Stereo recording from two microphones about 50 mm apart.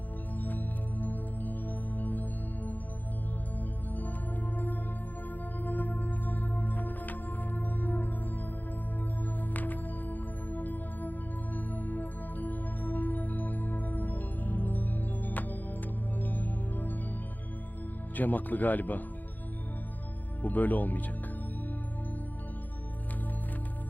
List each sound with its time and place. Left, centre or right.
0.3 s music: left
3.6 s music: left
9.2 s music: left
18.2 s speech: left
20.4 s speech: left